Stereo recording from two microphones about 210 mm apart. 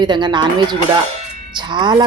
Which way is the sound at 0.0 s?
20° right (ahead or behind).